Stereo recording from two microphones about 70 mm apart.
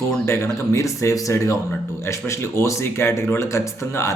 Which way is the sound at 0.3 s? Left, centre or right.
Left.